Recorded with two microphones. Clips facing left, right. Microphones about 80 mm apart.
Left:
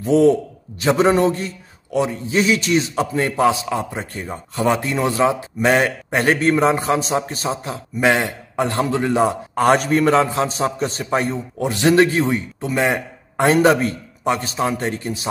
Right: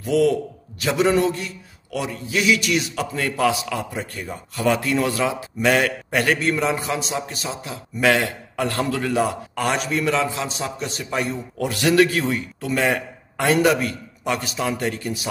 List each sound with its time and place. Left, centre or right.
0.0 s a man's voice: left
8.0 s a man's voice: left
9.7 s a man's voice: left